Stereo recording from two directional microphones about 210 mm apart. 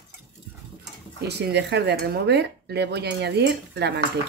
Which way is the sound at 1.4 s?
50° right (ahead or behind).